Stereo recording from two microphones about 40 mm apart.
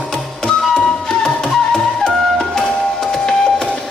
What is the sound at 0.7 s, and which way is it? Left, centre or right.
Music, centre.